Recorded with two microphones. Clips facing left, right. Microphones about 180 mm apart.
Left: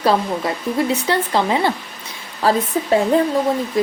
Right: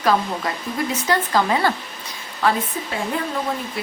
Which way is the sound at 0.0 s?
30° left (ahead or behind).